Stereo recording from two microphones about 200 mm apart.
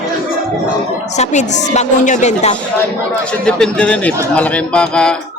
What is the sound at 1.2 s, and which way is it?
A woman's voice, 35° left (ahead or behind).